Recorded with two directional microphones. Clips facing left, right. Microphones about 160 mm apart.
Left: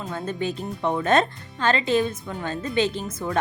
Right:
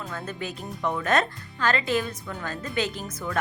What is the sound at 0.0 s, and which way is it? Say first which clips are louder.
Speech: left 6 dB; 25° left (ahead or behind).